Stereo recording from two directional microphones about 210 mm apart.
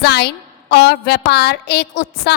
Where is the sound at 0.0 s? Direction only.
50° left (ahead or behind).